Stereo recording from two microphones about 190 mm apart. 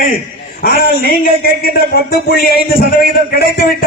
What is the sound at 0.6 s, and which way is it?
A man's voice, 55° left (ahead or behind).